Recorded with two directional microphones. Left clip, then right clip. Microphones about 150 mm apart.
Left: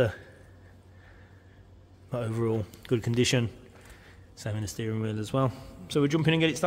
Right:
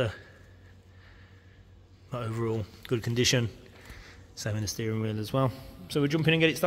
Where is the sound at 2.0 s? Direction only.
30° left (ahead or behind).